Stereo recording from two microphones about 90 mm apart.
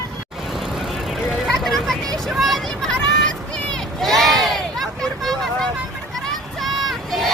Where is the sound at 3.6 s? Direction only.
10° left (ahead or behind).